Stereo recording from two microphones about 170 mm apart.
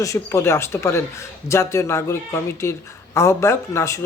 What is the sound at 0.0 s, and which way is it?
Speech, 20° left (ahead or behind).